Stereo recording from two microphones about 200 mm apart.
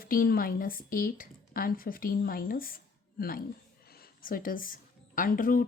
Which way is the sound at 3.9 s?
50° left (ahead or behind).